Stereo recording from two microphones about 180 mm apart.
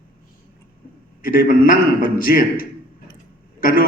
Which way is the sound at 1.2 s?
50° left (ahead or behind).